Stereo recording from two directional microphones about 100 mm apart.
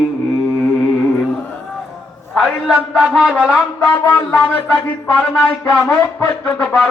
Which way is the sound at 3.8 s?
15° left (ahead or behind).